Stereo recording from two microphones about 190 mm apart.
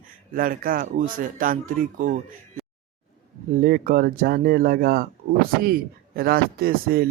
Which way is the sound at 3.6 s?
50° right (ahead or behind).